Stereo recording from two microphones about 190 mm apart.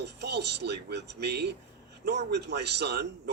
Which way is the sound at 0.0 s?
60° right (ahead or behind).